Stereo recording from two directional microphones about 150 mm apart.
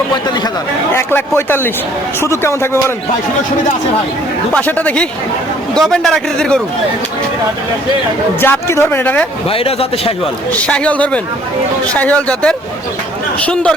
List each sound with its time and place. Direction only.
0.9 s a man's voice: 15° left (ahead or behind)
4.5 s a man's voice: 10° left (ahead or behind)
8.4 s a man's voice: 15° left (ahead or behind)
9.5 s a man's voice: 40° left (ahead or behind)
10.6 s a man's voice: 5° left (ahead or behind)